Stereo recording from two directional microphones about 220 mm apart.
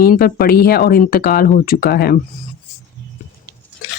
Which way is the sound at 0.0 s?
40° left (ahead or behind).